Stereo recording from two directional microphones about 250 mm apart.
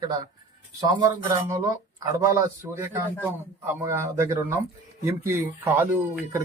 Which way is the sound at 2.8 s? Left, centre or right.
Centre.